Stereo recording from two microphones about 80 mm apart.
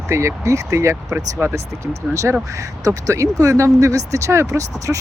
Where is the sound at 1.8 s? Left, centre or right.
Right.